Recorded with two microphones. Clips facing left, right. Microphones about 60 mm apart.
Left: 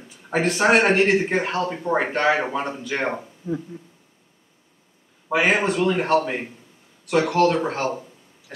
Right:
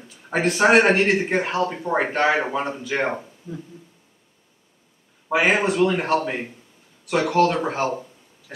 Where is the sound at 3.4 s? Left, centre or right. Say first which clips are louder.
Left 9 dB; left.